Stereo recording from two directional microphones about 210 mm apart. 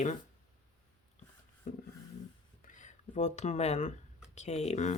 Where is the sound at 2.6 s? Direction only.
35° left (ahead or behind).